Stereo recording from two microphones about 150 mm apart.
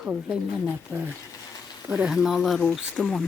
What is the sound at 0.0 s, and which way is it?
Speech, 5° right (ahead or behind).